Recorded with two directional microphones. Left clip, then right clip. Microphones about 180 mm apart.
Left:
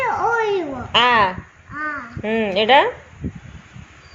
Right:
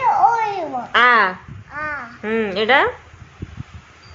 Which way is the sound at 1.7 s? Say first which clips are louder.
Even; 35° right (ahead or behind).